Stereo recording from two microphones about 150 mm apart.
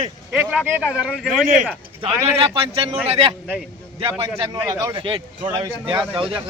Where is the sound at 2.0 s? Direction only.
40° right (ahead or behind).